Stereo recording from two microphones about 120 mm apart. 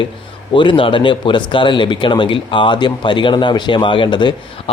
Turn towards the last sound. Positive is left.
turn(degrees=40)  # may be behind; listen again after turning